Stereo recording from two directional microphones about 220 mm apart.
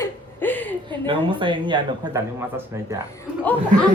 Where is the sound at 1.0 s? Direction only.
20° right (ahead or behind).